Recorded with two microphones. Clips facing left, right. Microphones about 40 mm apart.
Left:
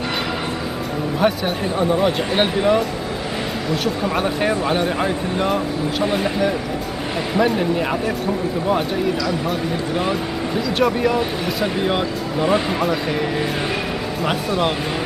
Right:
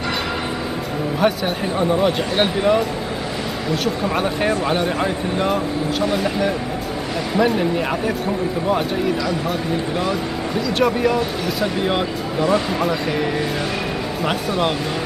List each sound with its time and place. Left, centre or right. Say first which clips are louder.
1.2 s speech: even; centre
6.0 s speech: even; centre
7.3 s speech: even; centre
10.5 s speech: even; centre